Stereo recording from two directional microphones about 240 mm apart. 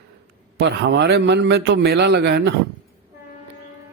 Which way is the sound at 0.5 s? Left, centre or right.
Right.